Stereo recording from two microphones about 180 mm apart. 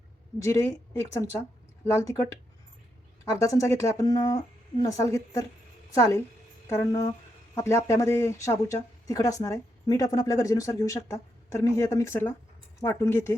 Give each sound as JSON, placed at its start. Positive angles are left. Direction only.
{"t": 0.3, "sound": "speech", "side_deg": 15}
{"t": 3.3, "sound": "speech", "side_deg": 15}